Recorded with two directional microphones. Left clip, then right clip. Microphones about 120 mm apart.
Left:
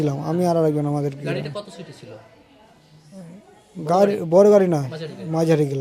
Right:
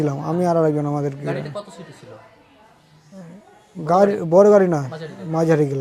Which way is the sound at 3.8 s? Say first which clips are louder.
Right 2 dB; 10° right (ahead or behind).